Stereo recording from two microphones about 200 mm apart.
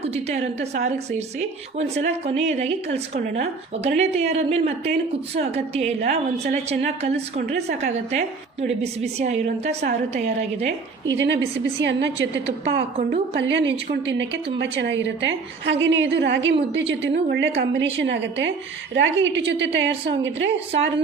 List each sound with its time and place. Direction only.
0.0 s speech: 30° right (ahead or behind)
11.1 s a woman's voice: 60° right (ahead or behind)